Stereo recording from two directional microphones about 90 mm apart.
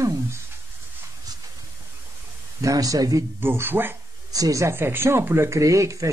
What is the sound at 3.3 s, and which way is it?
Speech, 25° right (ahead or behind).